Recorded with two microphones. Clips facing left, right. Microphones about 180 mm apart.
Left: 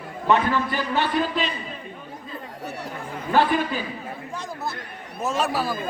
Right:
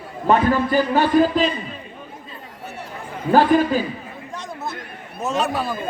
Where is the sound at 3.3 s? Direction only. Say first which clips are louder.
Right 6 dB; 40° right (ahead or behind).